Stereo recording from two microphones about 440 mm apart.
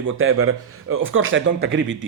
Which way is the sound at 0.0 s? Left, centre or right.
Right.